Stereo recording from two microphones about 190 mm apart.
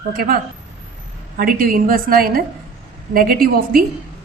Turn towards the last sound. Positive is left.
turn(degrees=-50)  # may be behind; listen again after turning